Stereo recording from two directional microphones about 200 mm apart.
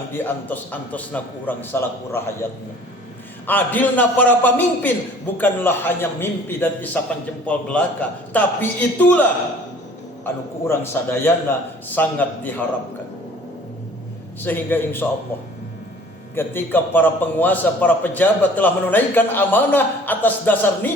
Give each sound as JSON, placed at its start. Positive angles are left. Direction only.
{"t": 0.1, "sound": "a man's voice", "side_deg": 10}
{"t": 3.4, "sound": "a man's voice", "side_deg": 10}
{"t": 10.2, "sound": "a man's voice", "side_deg": 10}
{"t": 14.4, "sound": "a man's voice", "side_deg": 10}
{"t": 16.3, "sound": "a man's voice", "side_deg": 10}